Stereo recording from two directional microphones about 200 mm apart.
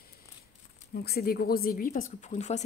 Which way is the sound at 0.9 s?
50° left (ahead or behind).